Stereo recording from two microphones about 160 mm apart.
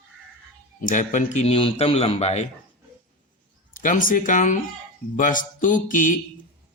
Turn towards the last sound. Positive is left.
turn(degrees=55)  # may be behind; listen again after turning